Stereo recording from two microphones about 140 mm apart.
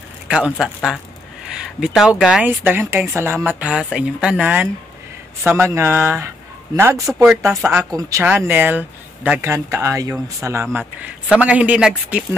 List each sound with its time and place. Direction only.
0.3 s a man's voice: 5° right (ahead or behind)